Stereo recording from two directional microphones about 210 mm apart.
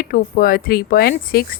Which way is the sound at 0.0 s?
45° left (ahead or behind).